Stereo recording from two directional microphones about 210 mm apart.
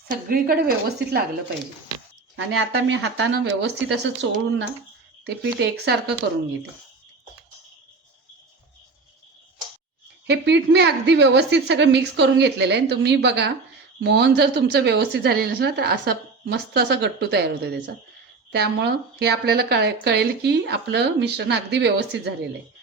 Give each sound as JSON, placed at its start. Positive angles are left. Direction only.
{"t": 0.3, "sound": "a woman's voice", "side_deg": -45}
{"t": 2.3, "sound": "a woman's voice", "side_deg": -65}
{"t": 10.2, "sound": "a woman's voice", "side_deg": -55}